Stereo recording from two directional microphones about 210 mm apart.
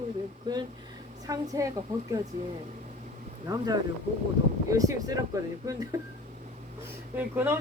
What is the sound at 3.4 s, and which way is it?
A woman's voice, 15° right (ahead or behind).